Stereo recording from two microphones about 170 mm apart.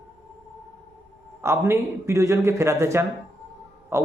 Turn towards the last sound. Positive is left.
turn(degrees=-15)  # may be behind; listen again after turning